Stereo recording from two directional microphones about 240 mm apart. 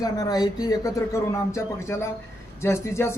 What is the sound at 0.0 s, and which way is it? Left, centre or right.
Speech, centre.